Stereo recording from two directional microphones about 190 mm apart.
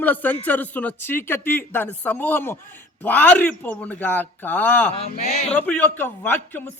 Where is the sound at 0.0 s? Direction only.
10° left (ahead or behind).